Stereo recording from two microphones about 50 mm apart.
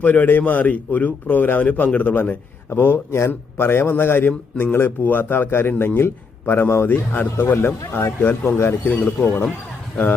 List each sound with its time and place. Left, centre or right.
0.0 s a man's voice: left
2.6 s a man's voice: left
8.9 s a man's voice: left